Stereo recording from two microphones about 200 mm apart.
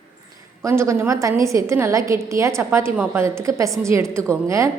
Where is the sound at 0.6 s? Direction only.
15° right (ahead or behind).